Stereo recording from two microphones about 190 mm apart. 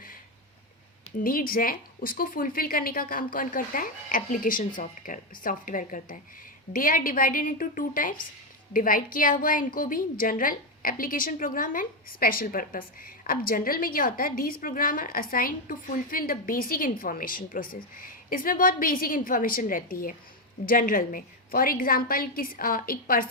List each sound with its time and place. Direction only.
1.2 s a woman's voice: 50° left (ahead or behind)